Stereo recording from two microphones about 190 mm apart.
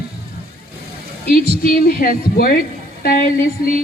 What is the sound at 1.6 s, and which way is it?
Speech, 50° left (ahead or behind).